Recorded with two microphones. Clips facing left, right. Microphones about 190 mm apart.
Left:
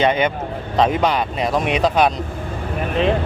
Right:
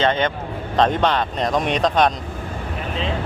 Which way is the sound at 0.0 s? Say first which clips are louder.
Left 2 dB; 10° left (ahead or behind).